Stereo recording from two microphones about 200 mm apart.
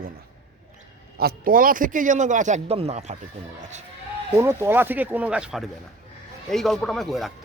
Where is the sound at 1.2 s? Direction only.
50° right (ahead or behind).